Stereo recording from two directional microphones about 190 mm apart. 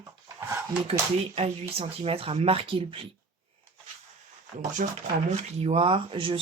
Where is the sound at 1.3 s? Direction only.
30° right (ahead or behind).